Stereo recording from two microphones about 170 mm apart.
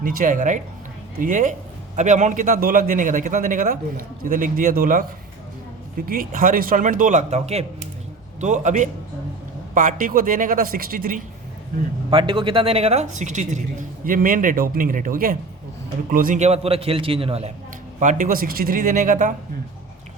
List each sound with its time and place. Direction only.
0.0 s a woman's voice: 50° right (ahead or behind)
6.1 s a woman's voice: 55° right (ahead or behind)
12.1 s a woman's voice: 30° right (ahead or behind)
18.0 s a woman's voice: 50° right (ahead or behind)